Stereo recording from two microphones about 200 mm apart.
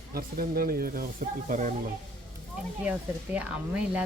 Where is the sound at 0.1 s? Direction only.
45° right (ahead or behind).